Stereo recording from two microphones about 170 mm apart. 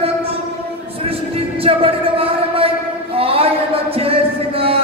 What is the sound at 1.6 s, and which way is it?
Music, 35° right (ahead or behind).